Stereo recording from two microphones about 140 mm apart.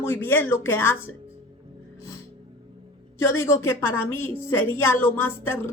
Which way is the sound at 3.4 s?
20° left (ahead or behind).